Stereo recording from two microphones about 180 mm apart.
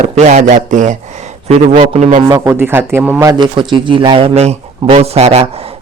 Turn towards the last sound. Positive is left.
turn(degrees=-35)  # may be behind; listen again after turning